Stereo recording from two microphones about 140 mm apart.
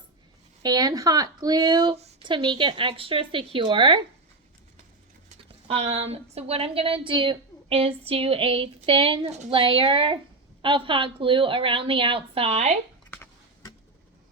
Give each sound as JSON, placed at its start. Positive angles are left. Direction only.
{"t": 0.6, "sound": "a woman's voice", "side_deg": -30}
{"t": 5.4, "sound": "a woman's voice", "side_deg": -45}